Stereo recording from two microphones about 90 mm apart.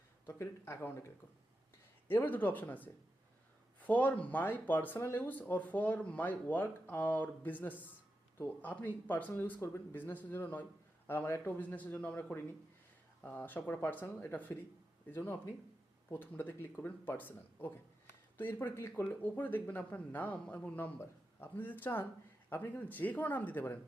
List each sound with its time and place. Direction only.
0.3 s speech: 30° left (ahead or behind)
2.0 s speech: 25° left (ahead or behind)
20.7 s speech: 20° left (ahead or behind)